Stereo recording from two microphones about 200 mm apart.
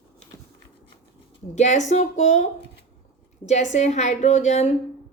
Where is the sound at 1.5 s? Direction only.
35° left (ahead or behind).